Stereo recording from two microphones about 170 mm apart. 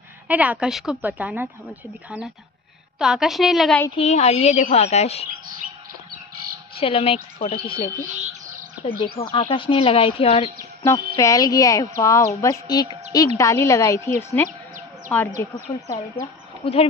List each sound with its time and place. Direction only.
0.3 s a woman's voice: 10° right (ahead or behind)
3.9 s speech: 40° left (ahead or behind)
6.8 s speech: 35° left (ahead or behind)
8.0 s music: 45° right (ahead or behind)
8.8 s speech: 30° left (ahead or behind)
11.1 s a woman's voice: 20° left (ahead or behind)
15.1 s a woman's voice: 5° left (ahead or behind)
15.7 s speech: 20° left (ahead or behind)
16.6 s speech: 35° left (ahead or behind)